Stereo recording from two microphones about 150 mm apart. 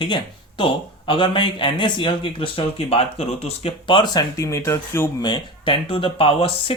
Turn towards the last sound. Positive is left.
turn(degrees=40)  # may be behind; listen again after turning